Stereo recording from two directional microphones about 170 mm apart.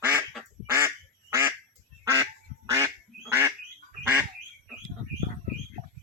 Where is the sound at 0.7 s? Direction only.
15° right (ahead or behind).